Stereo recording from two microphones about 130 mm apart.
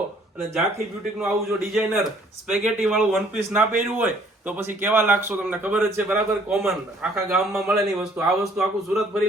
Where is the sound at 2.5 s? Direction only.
10° right (ahead or behind).